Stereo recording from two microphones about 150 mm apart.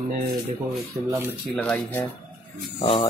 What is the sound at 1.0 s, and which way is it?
Speech, 20° right (ahead or behind).